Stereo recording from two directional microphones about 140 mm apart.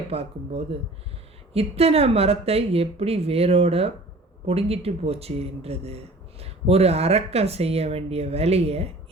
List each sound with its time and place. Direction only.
0.1 s speech: 45° right (ahead or behind)